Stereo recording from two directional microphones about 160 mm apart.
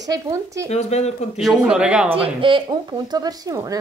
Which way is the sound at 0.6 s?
45° left (ahead or behind).